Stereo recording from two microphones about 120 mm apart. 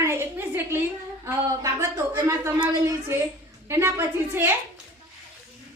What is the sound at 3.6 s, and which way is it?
Speech, 20° right (ahead or behind).